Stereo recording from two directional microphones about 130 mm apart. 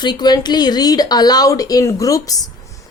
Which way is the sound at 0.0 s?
35° left (ahead or behind).